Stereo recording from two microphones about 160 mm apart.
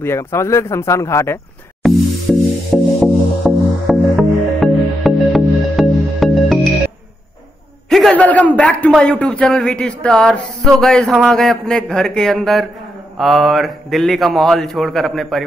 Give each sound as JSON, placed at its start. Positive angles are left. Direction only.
{"t": 0.0, "sound": "speech", "side_deg": 15}
{"t": 1.8, "sound": "music", "side_deg": 0}
{"t": 7.9, "sound": "a man's voice", "side_deg": 5}